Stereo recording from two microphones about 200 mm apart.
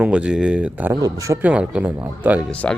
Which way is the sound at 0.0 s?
5° right (ahead or behind).